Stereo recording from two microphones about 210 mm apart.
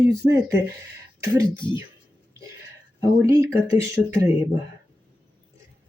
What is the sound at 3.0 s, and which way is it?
Speech, 15° right (ahead or behind).